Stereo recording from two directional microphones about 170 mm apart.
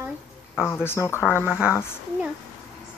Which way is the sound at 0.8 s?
15° left (ahead or behind).